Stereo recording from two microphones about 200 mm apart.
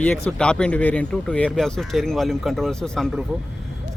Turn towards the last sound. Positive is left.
turn(degrees=0)  # may be behind; listen again after turning